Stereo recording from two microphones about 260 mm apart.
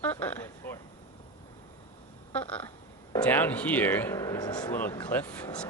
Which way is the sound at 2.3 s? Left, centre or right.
Centre.